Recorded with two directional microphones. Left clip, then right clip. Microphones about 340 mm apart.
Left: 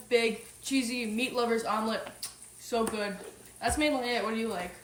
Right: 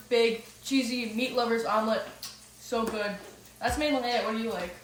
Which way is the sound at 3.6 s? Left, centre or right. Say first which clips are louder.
Right 1 dB; centre.